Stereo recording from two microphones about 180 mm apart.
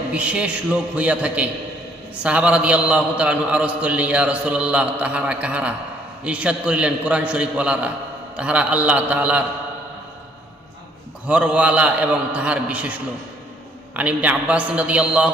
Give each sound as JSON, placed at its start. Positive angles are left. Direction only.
{"t": 0.1, "sound": "a man's voice", "side_deg": -5}
{"t": 11.3, "sound": "a man's voice", "side_deg": -5}